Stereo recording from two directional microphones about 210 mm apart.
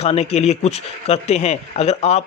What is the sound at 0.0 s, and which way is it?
Speech, 30° left (ahead or behind).